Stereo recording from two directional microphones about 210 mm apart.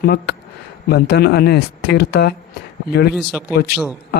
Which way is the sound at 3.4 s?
5° right (ahead or behind).